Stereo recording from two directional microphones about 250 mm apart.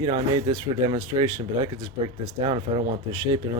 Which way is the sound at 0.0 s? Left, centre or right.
Centre.